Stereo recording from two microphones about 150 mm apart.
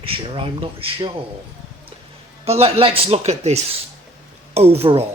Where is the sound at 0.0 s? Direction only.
35° right (ahead or behind).